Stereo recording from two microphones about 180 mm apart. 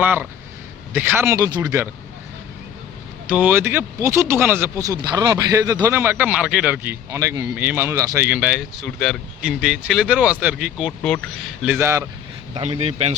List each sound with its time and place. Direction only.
0.0 s speech: 10° right (ahead or behind)
3.2 s speech: 10° right (ahead or behind)
12.7 s a man's voice: 35° right (ahead or behind)